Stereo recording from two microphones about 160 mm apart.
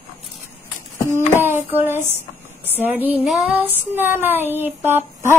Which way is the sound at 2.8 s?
10° right (ahead or behind).